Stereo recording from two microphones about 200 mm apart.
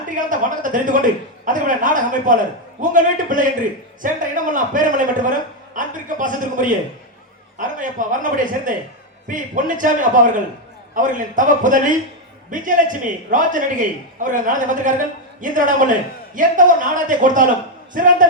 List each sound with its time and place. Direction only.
0.1 s a man's voice: 40° right (ahead or behind)
7.8 s a man's voice: 40° right (ahead or behind)